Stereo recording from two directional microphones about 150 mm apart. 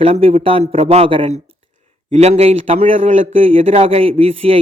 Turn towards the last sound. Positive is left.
turn(degrees=-40)  # may be behind; listen again after turning